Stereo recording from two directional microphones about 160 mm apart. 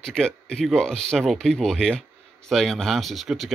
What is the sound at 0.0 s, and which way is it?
Speech, 5° left (ahead or behind).